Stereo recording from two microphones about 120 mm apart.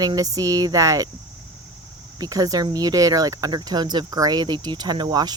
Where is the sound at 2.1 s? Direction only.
30° right (ahead or behind).